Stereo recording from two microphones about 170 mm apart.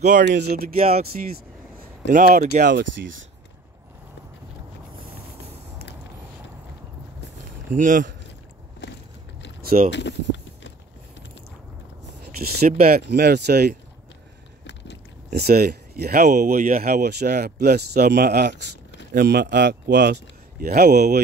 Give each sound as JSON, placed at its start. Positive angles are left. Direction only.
{"t": 0.0, "sound": "speech", "side_deg": -50}
{"t": 0.4, "sound": "speech", "side_deg": -70}
{"t": 0.7, "sound": "speech", "side_deg": -35}
{"t": 2.1, "sound": "speech", "side_deg": -55}
{"t": 2.7, "sound": "speech", "side_deg": -90}
{"t": 7.7, "sound": "speech", "side_deg": -50}
{"t": 9.6, "sound": "boat", "side_deg": -60}
{"t": 9.8, "sound": "a sound", "side_deg": 90}
{"t": 12.4, "sound": "speech", "side_deg": -60}
{"t": 15.3, "sound": "speech", "side_deg": -65}
{"t": 20.6, "sound": "speech", "side_deg": -65}